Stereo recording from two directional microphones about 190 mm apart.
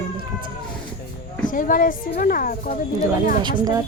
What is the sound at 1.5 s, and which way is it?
A woman's voice, 45° left (ahead or behind).